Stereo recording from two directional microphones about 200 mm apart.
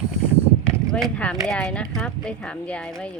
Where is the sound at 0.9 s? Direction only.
5° left (ahead or behind).